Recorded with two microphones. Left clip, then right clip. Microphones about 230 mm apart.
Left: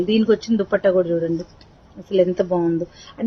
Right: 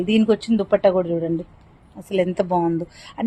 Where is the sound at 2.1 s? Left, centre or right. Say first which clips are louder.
Left 2 dB; right.